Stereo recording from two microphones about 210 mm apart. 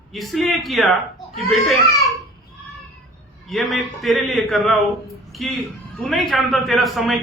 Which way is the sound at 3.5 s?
Centre (ahead or behind).